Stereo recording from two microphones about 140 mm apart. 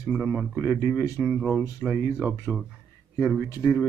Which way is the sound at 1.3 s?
Centre (ahead or behind).